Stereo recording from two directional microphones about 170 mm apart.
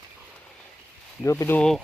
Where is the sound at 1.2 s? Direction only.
15° left (ahead or behind).